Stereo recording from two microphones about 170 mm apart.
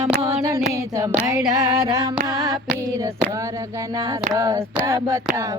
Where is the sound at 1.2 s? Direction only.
20° right (ahead or behind).